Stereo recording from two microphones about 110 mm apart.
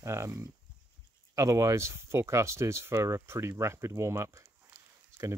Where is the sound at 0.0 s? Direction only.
25° right (ahead or behind).